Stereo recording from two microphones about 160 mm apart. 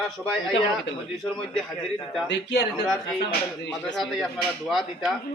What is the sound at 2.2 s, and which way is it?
Speech, 90° left.